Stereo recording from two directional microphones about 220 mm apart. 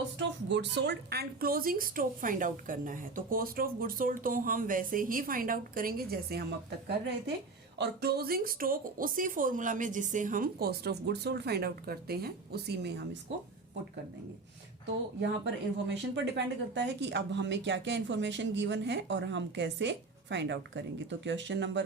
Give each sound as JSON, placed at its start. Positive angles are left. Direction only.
{"t": 0.2, "sound": "speech", "side_deg": -55}
{"t": 15.9, "sound": "speech", "side_deg": -50}